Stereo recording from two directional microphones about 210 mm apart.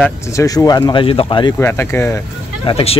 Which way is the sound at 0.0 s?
15° left (ahead or behind).